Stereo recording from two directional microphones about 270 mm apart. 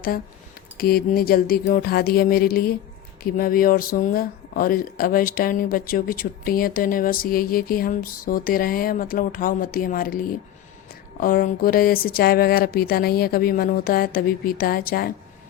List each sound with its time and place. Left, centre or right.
0.8 s speech: left